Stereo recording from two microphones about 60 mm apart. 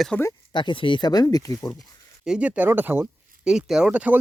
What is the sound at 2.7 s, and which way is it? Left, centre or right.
Speech, right.